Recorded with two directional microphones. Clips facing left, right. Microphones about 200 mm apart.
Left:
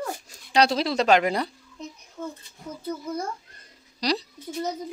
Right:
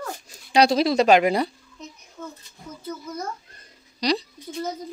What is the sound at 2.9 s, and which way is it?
Speech, 30° left (ahead or behind).